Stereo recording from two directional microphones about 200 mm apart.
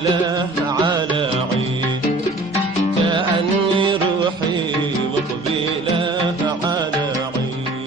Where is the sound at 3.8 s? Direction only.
25° right (ahead or behind).